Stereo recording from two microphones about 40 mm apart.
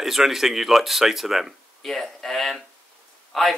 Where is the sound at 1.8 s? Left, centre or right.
Centre.